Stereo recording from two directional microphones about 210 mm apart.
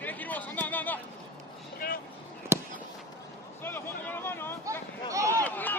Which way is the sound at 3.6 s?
10° left (ahead or behind).